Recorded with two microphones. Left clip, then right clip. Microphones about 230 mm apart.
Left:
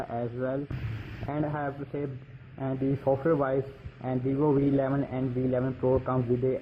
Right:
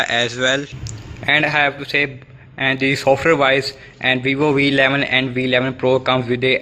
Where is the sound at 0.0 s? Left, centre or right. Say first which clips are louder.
Right 15 dB; right.